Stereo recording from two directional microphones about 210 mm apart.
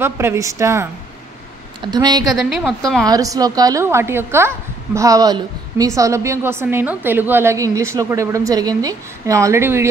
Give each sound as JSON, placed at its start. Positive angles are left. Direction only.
{"t": 0.0, "sound": "a woman's voice", "side_deg": -10}
{"t": 2.5, "sound": "a woman's voice", "side_deg": 0}
{"t": 3.1, "sound": "a woman's voice", "side_deg": -15}